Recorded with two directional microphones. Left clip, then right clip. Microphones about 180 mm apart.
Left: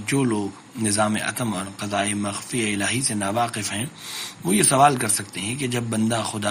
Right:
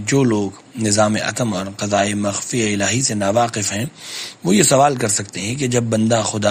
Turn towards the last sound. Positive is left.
turn(degrees=-40)  # may be behind; listen again after turning